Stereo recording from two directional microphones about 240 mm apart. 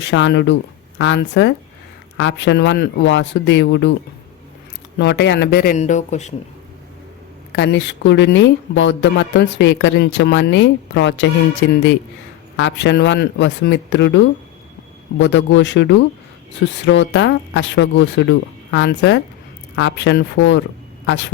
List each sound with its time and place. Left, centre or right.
0.0 s speech: left
4.9 s speech: left
5.7 s speech: left
7.5 s speech: left
12.5 s speech: left